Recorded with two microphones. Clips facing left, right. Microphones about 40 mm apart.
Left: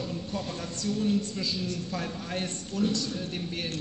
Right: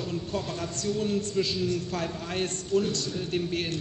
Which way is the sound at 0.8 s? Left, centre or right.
Right.